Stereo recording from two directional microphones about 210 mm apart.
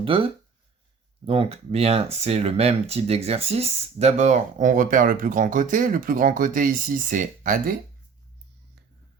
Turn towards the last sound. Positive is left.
turn(degrees=-40)  # may be behind; listen again after turning